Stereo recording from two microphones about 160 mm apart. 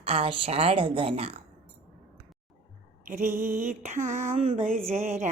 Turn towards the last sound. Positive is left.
turn(degrees=-50)  # may be behind; listen again after turning